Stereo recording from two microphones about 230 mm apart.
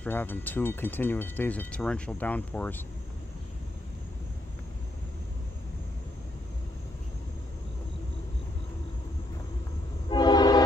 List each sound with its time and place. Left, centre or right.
0.0 s speech: centre
10.0 s train: centre